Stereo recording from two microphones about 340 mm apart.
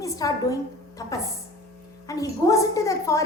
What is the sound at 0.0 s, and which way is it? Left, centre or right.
A woman's voice, centre.